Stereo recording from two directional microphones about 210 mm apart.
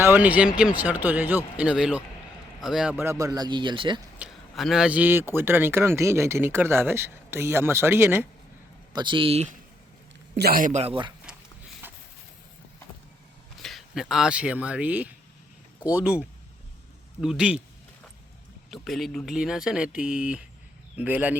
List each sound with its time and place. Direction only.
0.0 s speech: 10° right (ahead or behind)
4.2 s speech: centre (ahead or behind)
8.9 s speech: 20° right (ahead or behind)
10.3 s a man's voice: 45° right (ahead or behind); by 11.1 s 25° right (ahead or behind)
11.8 s a sound: 10° right (ahead or behind)
13.6 s speech: centre (ahead or behind)
18.7 s speech: centre (ahead or behind)